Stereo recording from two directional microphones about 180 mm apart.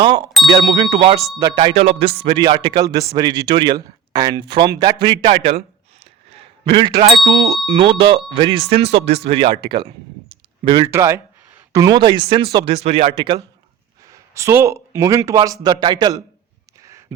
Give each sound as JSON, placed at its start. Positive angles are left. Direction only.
{"t": 0.0, "sound": "speech", "side_deg": -25}
{"t": 10.9, "sound": "speech", "side_deg": -15}
{"t": 14.0, "sound": "speech", "side_deg": -15}
{"t": 16.8, "sound": "a sound", "side_deg": -15}